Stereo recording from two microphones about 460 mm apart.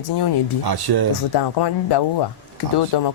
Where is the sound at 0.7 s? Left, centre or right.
Right.